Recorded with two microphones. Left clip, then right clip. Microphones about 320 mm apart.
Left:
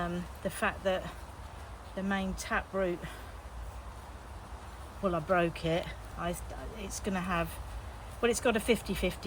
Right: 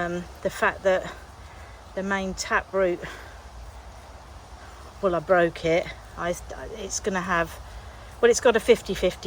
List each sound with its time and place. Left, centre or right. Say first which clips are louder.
0.0 s speech: right 8 dB; right
5.0 s speech: right 9 dB; right